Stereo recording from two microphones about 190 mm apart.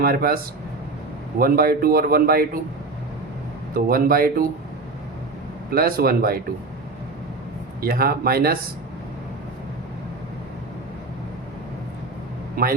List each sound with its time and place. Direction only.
0.0 s a man's voice: 55° right (ahead or behind)
1.4 s a man's voice: 50° right (ahead or behind)
3.8 s a man's voice: 50° right (ahead or behind)
5.7 s a man's voice: 50° right (ahead or behind)
7.8 s a man's voice: 50° right (ahead or behind)